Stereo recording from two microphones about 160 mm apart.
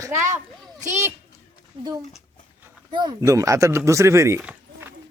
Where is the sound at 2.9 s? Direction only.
30° right (ahead or behind).